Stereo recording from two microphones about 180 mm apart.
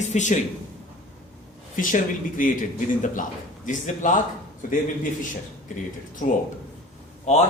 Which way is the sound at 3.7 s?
45° left (ahead or behind).